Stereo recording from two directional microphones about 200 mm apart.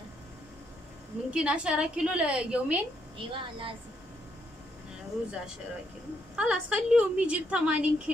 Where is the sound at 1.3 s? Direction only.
5° right (ahead or behind).